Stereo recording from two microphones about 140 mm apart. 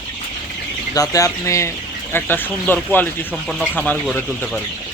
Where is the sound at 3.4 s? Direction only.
Centre (ahead or behind).